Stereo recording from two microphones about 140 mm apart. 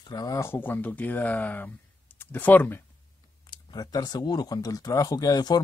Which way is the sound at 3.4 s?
30° left (ahead or behind).